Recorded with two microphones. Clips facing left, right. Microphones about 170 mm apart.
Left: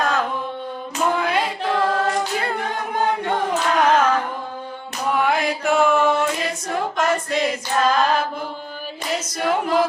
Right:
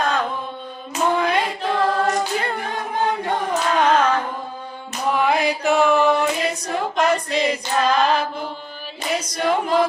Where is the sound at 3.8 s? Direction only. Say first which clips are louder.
Even; 10° left (ahead or behind).